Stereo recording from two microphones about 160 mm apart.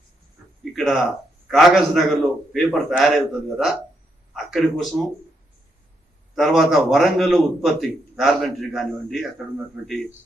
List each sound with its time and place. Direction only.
0.6 s a sound: centre (ahead or behind)
1.5 s a man's voice: centre (ahead or behind)
6.3 s a man's voice: centre (ahead or behind)